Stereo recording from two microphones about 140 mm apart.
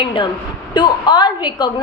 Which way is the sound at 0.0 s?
35° left (ahead or behind).